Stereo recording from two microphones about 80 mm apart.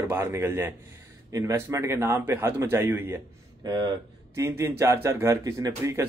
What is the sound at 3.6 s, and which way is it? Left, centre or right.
Speech, right.